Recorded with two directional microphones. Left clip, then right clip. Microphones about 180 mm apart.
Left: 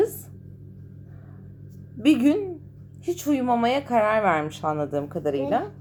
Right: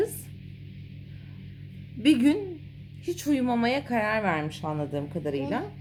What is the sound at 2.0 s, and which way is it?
A woman's voice, 20° right (ahead or behind).